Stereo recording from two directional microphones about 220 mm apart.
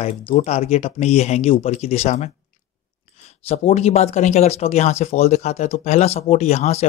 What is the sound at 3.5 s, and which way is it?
Speech, 30° left (ahead or behind).